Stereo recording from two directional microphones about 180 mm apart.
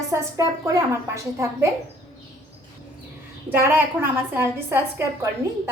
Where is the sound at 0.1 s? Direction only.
15° right (ahead or behind).